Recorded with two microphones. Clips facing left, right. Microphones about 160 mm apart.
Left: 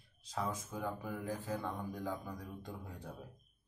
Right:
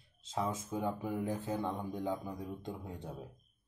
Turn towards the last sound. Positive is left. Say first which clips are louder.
# right 4 dB
turn(degrees=-25)  # may be behind; listen again after turning